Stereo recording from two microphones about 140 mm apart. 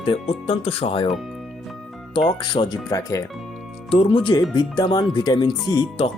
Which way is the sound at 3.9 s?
40° left (ahead or behind).